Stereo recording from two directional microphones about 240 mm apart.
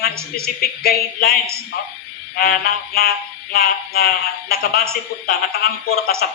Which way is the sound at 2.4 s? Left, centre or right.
Left.